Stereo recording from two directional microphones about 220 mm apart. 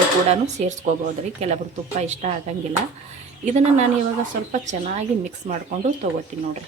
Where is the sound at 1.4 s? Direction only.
30° right (ahead or behind).